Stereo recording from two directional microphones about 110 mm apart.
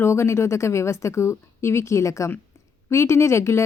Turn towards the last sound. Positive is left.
turn(degrees=25)  # may be behind; listen again after turning